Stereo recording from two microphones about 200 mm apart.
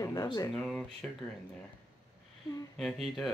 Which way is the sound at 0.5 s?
Centre (ahead or behind).